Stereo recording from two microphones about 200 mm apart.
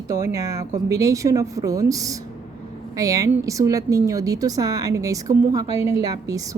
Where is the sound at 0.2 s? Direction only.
15° right (ahead or behind).